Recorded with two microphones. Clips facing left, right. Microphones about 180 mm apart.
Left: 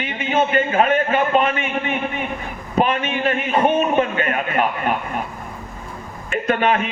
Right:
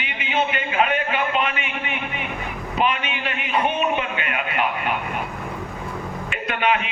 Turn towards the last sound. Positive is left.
turn(degrees=40)  # may be behind; listen again after turning